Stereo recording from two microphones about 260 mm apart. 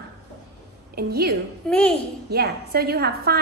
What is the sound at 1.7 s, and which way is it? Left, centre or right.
Speech, centre.